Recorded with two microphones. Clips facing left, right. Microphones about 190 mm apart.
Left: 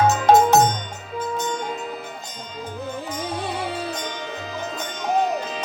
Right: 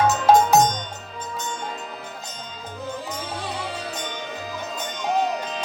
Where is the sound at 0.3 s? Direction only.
5° right (ahead or behind).